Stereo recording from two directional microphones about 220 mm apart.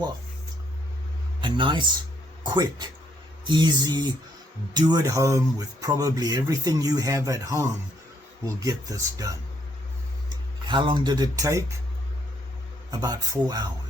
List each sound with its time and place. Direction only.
1.4 s speech: 20° right (ahead or behind)
2.4 s music: 20° right (ahead or behind)
4.7 s speech: 20° right (ahead or behind)
12.9 s speech: 15° right (ahead or behind)